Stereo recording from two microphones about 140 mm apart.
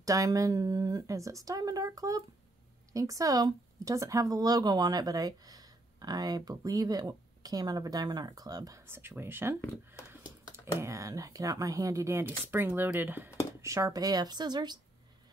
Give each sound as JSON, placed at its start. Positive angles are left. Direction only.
{"t": 0.0, "sound": "speech", "side_deg": -25}
{"t": 10.8, "sound": "speech", "side_deg": -20}